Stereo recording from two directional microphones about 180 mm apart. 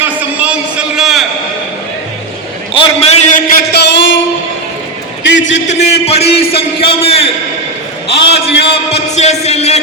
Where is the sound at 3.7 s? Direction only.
85° left.